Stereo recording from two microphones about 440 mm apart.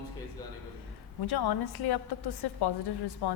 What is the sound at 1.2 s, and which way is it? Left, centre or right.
A woman's voice, left.